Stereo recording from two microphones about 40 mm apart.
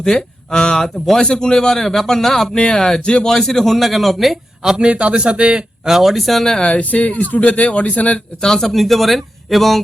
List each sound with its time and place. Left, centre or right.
0.0 s a man's voice: centre
4.6 s a man's voice: centre
4.9 s a man's voice: right
5.9 s speech: centre
6.6 s speech: left
8.4 s speech: centre